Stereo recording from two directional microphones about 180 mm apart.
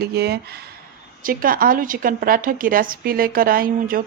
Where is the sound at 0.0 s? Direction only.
60° right (ahead or behind).